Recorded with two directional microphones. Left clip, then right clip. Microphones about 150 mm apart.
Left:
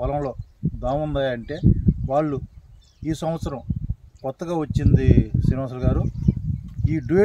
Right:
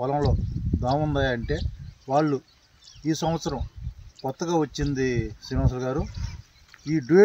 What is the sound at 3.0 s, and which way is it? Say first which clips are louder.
Speech: even; 40° left (ahead or behind).